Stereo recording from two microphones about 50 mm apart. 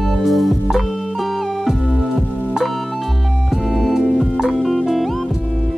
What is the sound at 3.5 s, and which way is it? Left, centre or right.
Music, centre.